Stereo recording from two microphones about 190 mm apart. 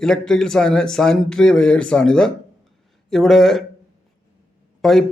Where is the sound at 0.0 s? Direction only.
5° left (ahead or behind).